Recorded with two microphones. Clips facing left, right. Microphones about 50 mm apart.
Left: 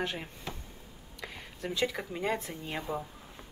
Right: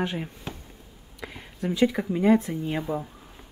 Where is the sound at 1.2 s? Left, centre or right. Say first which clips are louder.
Right 7 dB; centre.